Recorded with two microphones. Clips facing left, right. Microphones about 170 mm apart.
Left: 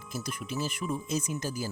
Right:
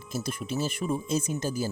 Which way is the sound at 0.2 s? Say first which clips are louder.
Right 4 dB; 30° right (ahead or behind).